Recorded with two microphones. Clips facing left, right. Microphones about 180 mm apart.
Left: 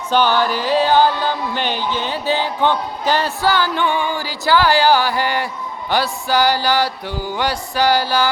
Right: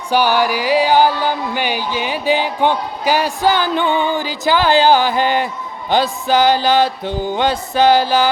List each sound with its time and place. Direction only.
0.1 s music: 10° right (ahead or behind)